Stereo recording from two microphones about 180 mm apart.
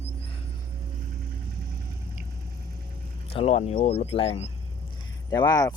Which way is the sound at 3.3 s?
35° left (ahead or behind).